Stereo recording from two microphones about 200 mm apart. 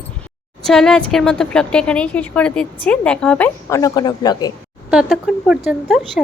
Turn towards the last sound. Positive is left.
turn(degrees=0)  # may be behind; listen again after turning